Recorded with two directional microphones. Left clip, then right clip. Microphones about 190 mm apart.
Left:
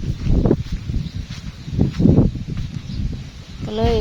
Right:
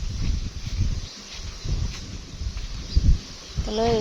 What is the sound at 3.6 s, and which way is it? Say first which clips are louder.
Speech: left 2 dB; 20° left (ahead or behind).